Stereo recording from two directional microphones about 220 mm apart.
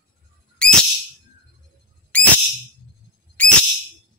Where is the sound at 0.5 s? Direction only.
5° left (ahead or behind).